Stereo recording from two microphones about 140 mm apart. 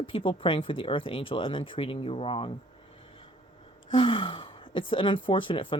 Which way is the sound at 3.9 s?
40° left (ahead or behind).